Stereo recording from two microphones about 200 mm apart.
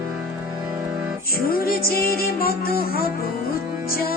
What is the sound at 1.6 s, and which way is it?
Music, 50° left (ahead or behind).